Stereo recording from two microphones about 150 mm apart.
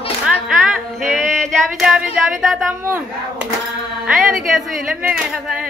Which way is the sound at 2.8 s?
15° right (ahead or behind).